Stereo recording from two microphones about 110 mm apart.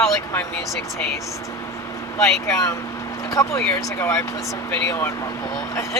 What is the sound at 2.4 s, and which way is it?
Speech, 30° left (ahead or behind).